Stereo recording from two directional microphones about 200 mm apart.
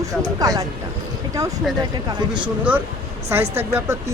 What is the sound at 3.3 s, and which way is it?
Speech, 10° right (ahead or behind).